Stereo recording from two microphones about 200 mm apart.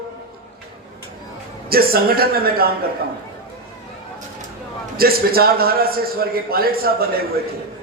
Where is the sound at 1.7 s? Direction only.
50° right (ahead or behind).